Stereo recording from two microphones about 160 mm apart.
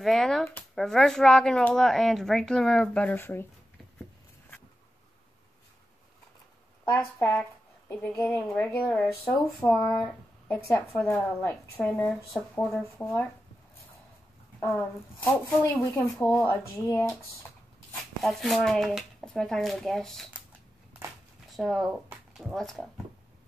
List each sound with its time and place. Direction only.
0.0 s speech: centre (ahead or behind)
6.8 s speech: 10° left (ahead or behind)
14.6 s speech: 10° left (ahead or behind)
18.2 s speech: centre (ahead or behind)
21.5 s speech: centre (ahead or behind)